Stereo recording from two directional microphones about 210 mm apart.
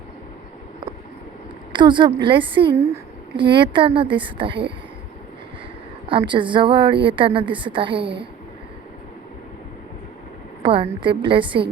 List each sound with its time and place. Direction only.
1.7 s a woman's voice: 20° right (ahead or behind)
6.1 s a woman's voice: 25° right (ahead or behind)
10.6 s a woman's voice: 25° right (ahead or behind)